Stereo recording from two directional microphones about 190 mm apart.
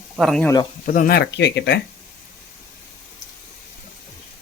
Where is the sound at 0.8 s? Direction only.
45° left (ahead or behind); by 1.7 s 65° left (ahead or behind).